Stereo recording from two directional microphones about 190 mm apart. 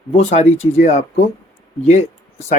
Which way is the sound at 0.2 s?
35° left (ahead or behind).